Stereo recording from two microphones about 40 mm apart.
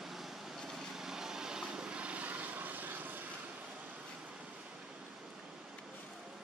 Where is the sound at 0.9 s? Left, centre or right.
Centre; by 3.3 s right.